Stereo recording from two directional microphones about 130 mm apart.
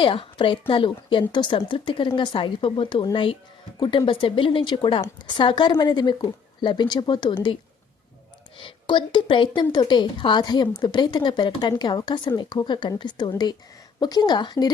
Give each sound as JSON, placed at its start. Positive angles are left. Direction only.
{"t": 0.0, "sound": "a woman's voice", "side_deg": 40}
{"t": 8.6, "sound": "a woman's voice", "side_deg": 35}